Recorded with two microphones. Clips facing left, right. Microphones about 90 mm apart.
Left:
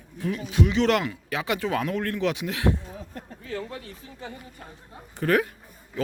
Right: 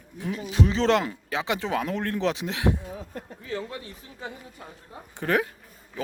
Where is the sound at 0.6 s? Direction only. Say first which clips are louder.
Even; 30° right (ahead or behind).